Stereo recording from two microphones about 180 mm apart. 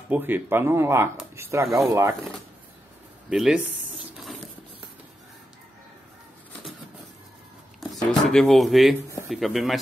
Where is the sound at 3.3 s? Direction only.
5° right (ahead or behind).